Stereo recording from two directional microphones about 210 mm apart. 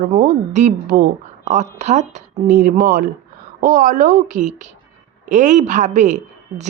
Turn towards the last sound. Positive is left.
turn(degrees=-35)  # may be behind; listen again after turning